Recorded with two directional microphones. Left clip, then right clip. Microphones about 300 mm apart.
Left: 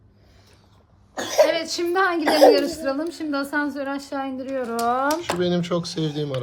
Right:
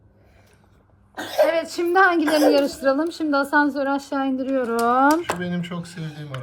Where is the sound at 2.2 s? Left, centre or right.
Left.